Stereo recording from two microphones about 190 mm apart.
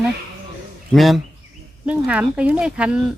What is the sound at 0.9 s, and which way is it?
Speech, centre (ahead or behind).